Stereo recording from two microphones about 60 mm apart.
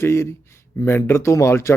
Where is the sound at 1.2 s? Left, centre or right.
Left.